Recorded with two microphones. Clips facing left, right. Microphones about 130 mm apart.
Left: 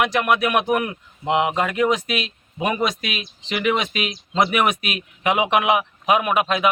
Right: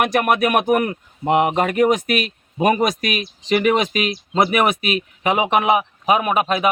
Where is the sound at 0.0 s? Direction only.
50° right (ahead or behind).